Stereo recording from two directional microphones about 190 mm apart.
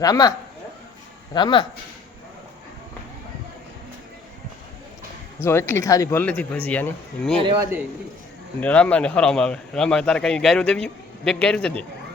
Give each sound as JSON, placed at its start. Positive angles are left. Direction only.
{"t": 0.0, "sound": "a man's voice", "side_deg": 20}
{"t": 5.4, "sound": "speech", "side_deg": 15}
{"t": 8.6, "sound": "a man's voice", "side_deg": 5}